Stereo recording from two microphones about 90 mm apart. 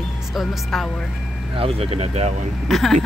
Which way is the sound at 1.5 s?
90° right.